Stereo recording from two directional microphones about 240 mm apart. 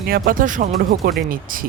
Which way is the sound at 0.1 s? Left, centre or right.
Right.